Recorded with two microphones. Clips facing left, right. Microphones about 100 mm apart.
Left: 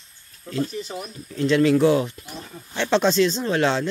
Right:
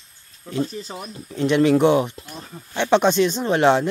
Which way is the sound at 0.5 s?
30° right (ahead or behind).